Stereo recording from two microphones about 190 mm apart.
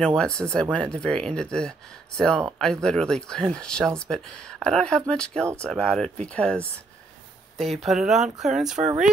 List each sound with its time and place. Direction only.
0.0 s speech: 5° left (ahead or behind)
8.7 s speech: 40° right (ahead or behind)